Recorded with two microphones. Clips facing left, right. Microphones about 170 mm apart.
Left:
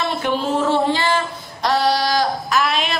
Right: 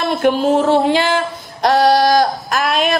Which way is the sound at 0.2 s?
50° right (ahead or behind).